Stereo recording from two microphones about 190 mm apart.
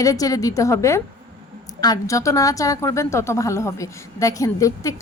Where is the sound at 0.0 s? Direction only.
20° left (ahead or behind).